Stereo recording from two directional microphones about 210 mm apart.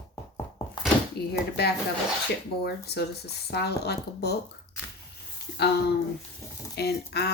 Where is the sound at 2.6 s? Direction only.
50° left (ahead or behind).